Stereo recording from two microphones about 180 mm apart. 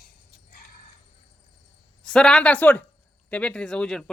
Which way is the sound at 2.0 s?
5° left (ahead or behind).